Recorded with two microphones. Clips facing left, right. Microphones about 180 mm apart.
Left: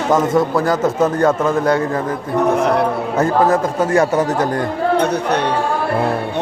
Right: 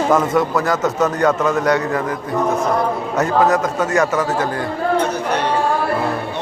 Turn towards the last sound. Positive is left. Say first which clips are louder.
# left 3 dB
turn(degrees=30)  # may be behind; listen again after turning